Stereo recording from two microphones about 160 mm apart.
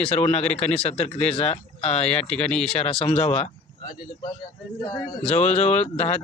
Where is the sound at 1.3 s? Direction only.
40° left (ahead or behind).